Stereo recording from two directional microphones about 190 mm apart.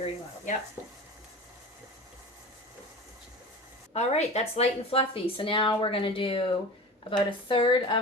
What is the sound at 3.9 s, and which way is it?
A woman's voice, 35° left (ahead or behind).